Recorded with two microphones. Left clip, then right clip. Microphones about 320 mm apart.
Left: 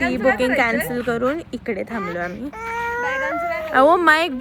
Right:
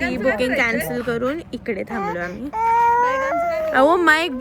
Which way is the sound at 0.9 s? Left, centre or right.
Centre.